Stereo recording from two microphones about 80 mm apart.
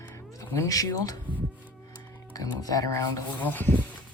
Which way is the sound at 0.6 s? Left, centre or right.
Left.